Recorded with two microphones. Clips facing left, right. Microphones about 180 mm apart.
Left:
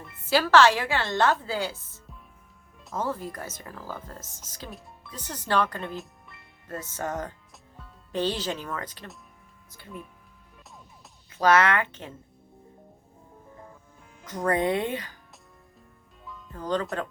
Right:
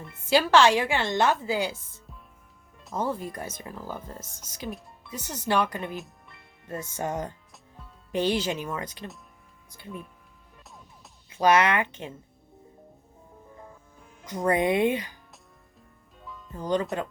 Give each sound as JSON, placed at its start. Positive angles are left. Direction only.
{"t": 0.3, "sound": "speech", "side_deg": -15}
{"t": 2.9, "sound": "speech", "side_deg": -15}
{"t": 4.3, "sound": "speech", "side_deg": 10}
{"t": 4.7, "sound": "music", "side_deg": 0}
{"t": 5.5, "sound": "speech", "side_deg": -10}
{"t": 6.0, "sound": "music", "side_deg": 0}
{"t": 6.7, "sound": "speech", "side_deg": -10}
{"t": 11.3, "sound": "speech", "side_deg": -15}
{"t": 14.3, "sound": "speech", "side_deg": -10}
{"t": 16.2, "sound": "music", "side_deg": 0}
{"t": 16.6, "sound": "speech", "side_deg": -15}